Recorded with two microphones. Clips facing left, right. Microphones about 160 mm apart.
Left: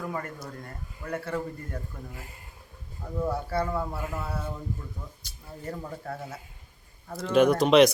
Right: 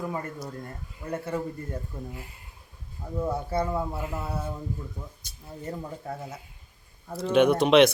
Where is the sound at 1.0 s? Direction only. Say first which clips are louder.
Right 1 dB; 20° right (ahead or behind).